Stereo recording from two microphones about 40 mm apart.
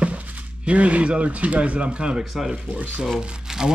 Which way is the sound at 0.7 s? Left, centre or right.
Right.